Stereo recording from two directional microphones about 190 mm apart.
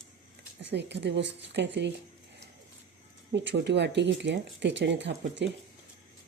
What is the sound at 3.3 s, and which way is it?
Speech, 70° right (ahead or behind).